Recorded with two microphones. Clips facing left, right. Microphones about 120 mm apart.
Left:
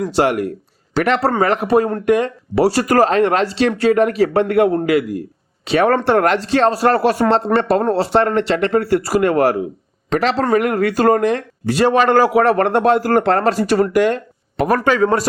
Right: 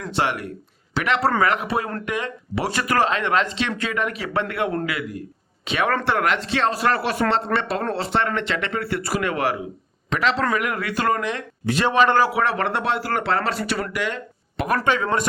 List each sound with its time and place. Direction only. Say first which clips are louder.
0.1 s speech: left 4 dB; 40° left (ahead or behind)